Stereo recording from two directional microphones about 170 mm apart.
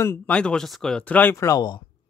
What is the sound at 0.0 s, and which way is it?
Speech, 10° left (ahead or behind).